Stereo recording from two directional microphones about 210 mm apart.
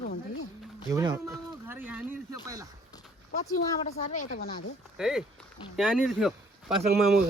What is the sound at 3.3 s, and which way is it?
Speech, 35° left (ahead or behind).